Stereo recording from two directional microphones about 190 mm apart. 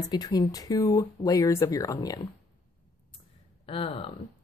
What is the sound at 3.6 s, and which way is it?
Speech, 30° left (ahead or behind).